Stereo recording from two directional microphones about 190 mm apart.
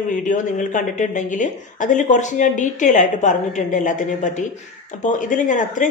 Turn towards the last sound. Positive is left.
turn(degrees=40)  # may be behind; listen again after turning